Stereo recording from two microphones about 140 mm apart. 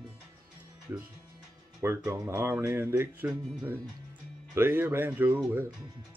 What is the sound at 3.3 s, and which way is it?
Speech, 5° right (ahead or behind).